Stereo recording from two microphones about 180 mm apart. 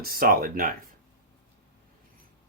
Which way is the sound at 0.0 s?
55° right (ahead or behind).